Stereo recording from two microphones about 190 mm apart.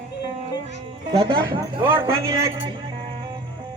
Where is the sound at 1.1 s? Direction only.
25° right (ahead or behind).